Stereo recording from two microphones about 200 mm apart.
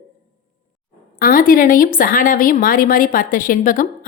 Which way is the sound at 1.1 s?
45° left (ahead or behind).